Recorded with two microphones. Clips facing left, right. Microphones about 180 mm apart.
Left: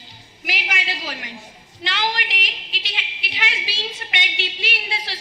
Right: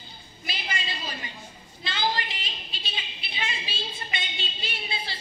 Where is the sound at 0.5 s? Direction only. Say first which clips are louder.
Left 5 dB; 90° left.